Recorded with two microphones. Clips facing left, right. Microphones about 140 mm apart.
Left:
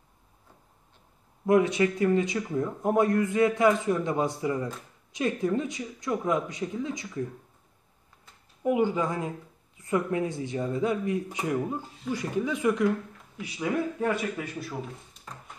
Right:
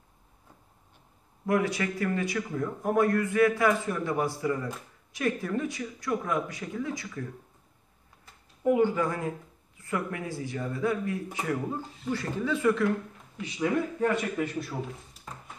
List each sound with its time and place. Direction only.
1.4 s speech: 20° left (ahead or behind)
8.6 s a man's voice: 15° left (ahead or behind)